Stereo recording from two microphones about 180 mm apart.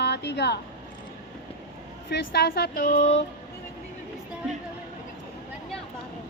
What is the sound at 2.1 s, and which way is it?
Speech, 65° left (ahead or behind).